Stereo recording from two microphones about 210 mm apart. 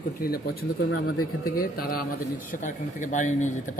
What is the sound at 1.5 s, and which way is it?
Speech, 45° left (ahead or behind).